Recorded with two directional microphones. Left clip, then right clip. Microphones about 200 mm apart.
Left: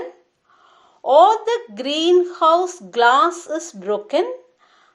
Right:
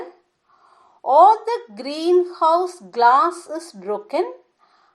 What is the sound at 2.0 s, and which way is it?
Speech, 20° left (ahead or behind).